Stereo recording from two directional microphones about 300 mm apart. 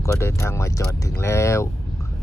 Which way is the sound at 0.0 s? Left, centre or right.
Centre.